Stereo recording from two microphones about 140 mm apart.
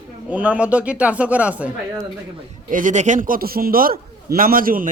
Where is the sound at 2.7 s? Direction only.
65° right (ahead or behind).